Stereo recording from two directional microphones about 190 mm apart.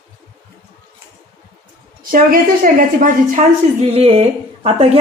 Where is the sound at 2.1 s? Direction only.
45° right (ahead or behind).